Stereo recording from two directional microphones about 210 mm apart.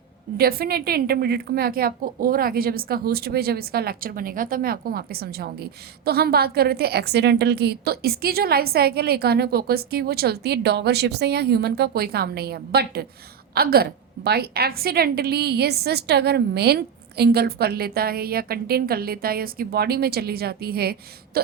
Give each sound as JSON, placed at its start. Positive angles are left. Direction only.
{"t": 0.3, "sound": "a woman's voice", "side_deg": -45}